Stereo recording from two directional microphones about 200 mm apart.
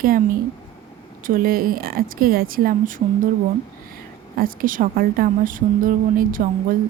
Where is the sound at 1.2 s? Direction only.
45° right (ahead or behind).